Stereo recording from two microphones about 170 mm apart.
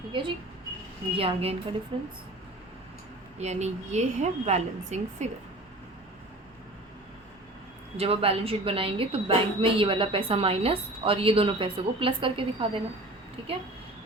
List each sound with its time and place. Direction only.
0.1 s a woman's voice: 30° right (ahead or behind)
3.3 s a woman's voice: 40° right (ahead or behind)
7.9 s a woman's voice: 35° right (ahead or behind)